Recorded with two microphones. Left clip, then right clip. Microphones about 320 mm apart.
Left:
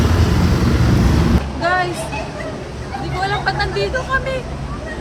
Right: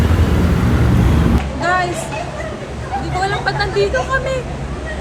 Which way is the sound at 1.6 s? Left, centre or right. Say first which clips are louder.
Right 1 dB; centre.